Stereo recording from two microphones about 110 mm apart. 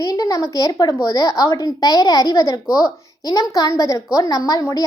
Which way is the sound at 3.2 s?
35° left (ahead or behind).